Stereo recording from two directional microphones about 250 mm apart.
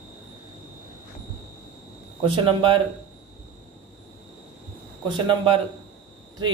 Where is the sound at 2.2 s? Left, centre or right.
Right.